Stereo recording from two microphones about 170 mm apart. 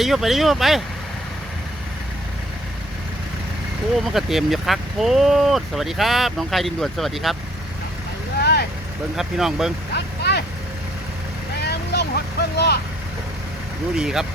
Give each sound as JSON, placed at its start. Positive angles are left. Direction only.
{"t": 0.0, "sound": "speech", "side_deg": 0}
{"t": 3.9, "sound": "speech", "side_deg": 0}
{"t": 8.4, "sound": "vehicle", "side_deg": 75}
{"t": 9.1, "sound": "speech", "side_deg": 0}
{"t": 9.9, "sound": "vehicle", "side_deg": 75}
{"t": 11.6, "sound": "vehicle", "side_deg": 80}
{"t": 13.9, "sound": "speech", "side_deg": -5}